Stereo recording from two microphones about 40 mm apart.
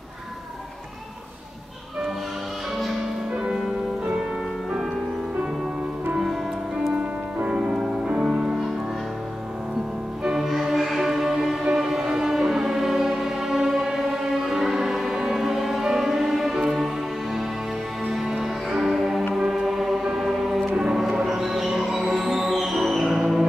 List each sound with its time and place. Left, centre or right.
7.0 s music: right
7.5 s music: centre
10.2 s music: centre
18.7 s music: centre